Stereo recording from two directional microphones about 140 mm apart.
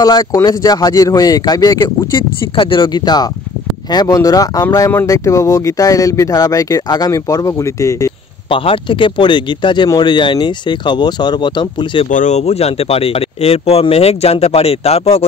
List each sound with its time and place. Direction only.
0.0 s speech: 25° left (ahead or behind)
2.5 s speech: 35° left (ahead or behind)
8.5 s speech: 40° left (ahead or behind)
12.1 s speech: 60° left (ahead or behind)